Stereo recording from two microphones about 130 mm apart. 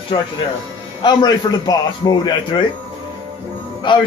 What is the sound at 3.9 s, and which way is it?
Speech, 40° left (ahead or behind).